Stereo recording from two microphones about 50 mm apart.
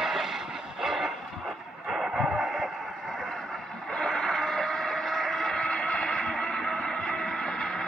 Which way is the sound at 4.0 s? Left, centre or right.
Centre.